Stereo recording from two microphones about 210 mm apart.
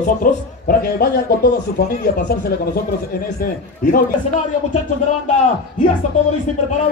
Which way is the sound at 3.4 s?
45° left (ahead or behind).